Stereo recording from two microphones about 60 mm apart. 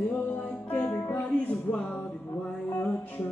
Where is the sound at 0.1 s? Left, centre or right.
Left.